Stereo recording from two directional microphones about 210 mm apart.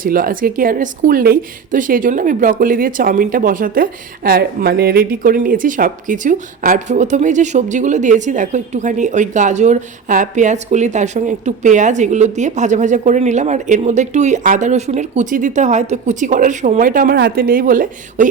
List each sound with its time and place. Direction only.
0.0 s a woman's voice: 40° right (ahead or behind)